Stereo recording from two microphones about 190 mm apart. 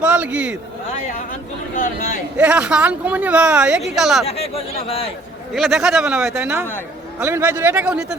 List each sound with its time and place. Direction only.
0.0 s a man's voice: 5° right (ahead or behind)
1.7 s speech: 45° left (ahead or behind)
2.4 s speech: 5° right (ahead or behind)
4.3 s speech: 30° left (ahead or behind)
5.5 s a man's voice: centre (ahead or behind)